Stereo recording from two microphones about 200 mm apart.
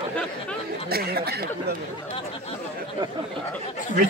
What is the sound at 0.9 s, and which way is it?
Speech, 50° right (ahead or behind).